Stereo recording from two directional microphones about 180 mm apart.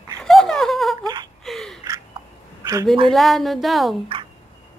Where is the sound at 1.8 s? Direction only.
20° right (ahead or behind).